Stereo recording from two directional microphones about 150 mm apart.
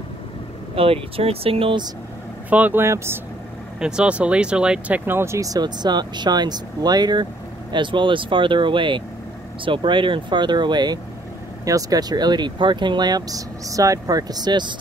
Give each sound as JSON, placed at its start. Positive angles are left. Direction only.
{"t": 0.7, "sound": "speech", "side_deg": -40}
{"t": 2.5, "sound": "speech", "side_deg": -10}
{"t": 3.8, "sound": "speech", "side_deg": -5}